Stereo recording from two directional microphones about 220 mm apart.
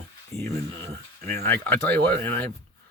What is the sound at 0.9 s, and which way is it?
Speech, 45° right (ahead or behind).